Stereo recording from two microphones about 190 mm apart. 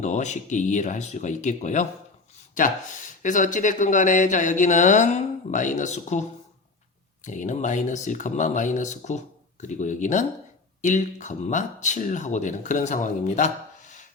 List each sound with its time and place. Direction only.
0.0 s speech: 40° left (ahead or behind)
7.3 s speech: 40° left (ahead or behind)